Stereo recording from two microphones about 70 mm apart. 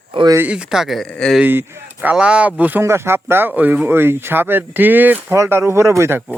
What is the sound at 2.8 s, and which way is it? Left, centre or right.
Speech, right.